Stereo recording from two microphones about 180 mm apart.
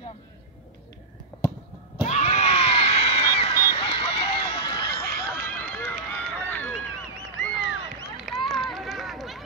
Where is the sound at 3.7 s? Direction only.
35° left (ahead or behind).